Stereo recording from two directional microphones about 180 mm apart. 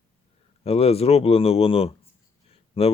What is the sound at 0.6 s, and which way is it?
Speech, 35° left (ahead or behind).